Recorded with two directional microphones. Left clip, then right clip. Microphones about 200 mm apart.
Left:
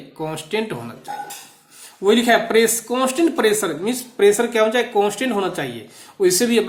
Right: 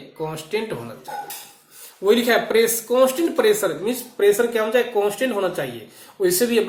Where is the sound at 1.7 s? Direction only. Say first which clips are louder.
Left 1 dB; 50° left (ahead or behind).